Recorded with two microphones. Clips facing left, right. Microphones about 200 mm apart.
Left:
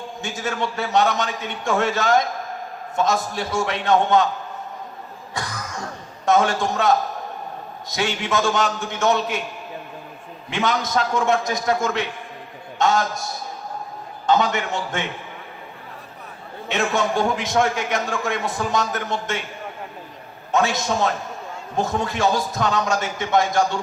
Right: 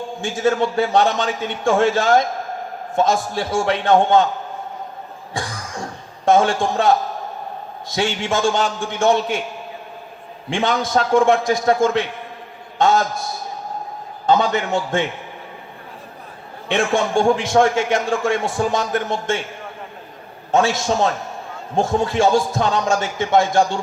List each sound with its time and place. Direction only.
0.2 s a man's voice: 30° right (ahead or behind)
5.3 s music: 30° right (ahead or behind)
6.2 s a man's voice: 30° right (ahead or behind)
10.5 s a man's voice: 30° right (ahead or behind)
14.3 s a man's voice: 30° right (ahead or behind)
16.6 s a man's voice: 30° right (ahead or behind)
20.5 s a man's voice: 30° right (ahead or behind)